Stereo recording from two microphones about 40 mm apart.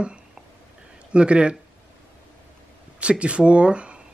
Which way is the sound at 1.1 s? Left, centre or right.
Right.